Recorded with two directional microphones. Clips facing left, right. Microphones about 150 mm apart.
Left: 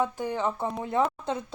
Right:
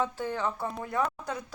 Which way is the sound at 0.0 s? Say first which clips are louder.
Left 3 dB; 15° left (ahead or behind).